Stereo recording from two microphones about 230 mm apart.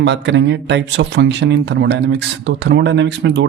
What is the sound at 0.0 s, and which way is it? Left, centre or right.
Speech, right.